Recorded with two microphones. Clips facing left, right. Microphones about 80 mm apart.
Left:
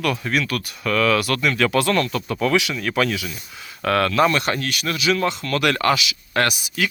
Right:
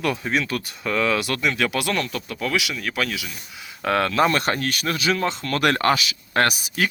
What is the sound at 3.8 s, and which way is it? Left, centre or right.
Speech, right.